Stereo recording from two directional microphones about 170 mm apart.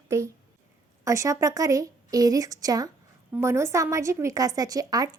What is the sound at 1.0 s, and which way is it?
A woman's voice, 20° right (ahead or behind).